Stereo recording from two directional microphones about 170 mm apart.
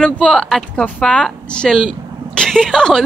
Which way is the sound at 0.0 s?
5° left (ahead or behind).